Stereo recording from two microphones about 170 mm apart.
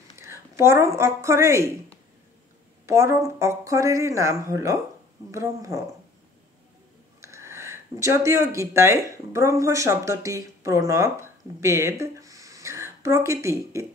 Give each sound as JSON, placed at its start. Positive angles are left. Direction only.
{"t": 0.2, "sound": "a woman's voice", "side_deg": -15}
{"t": 2.9, "sound": "speech", "side_deg": -15}
{"t": 7.2, "sound": "speech", "side_deg": -15}